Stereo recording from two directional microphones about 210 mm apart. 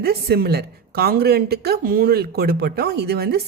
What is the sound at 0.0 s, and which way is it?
A woman's voice, 50° right (ahead or behind).